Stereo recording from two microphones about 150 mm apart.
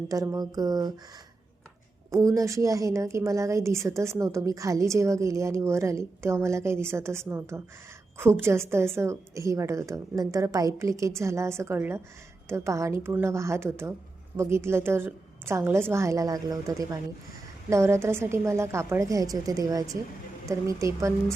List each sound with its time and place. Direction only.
0.1 s a woman's voice: 20° right (ahead or behind)
2.0 s a woman's voice: 20° right (ahead or behind)